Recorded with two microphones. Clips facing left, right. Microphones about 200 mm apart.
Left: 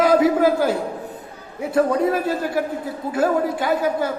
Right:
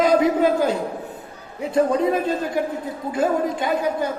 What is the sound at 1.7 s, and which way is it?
A man's voice, 20° right (ahead or behind).